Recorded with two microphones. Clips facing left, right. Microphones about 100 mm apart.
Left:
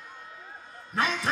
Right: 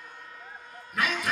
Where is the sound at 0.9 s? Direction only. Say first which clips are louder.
Left 1 dB; 30° left (ahead or behind).